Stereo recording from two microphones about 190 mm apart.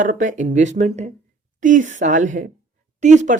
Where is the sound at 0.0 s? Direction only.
45° right (ahead or behind).